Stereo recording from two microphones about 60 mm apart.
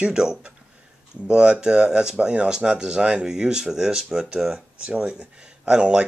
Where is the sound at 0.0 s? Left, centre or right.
Centre.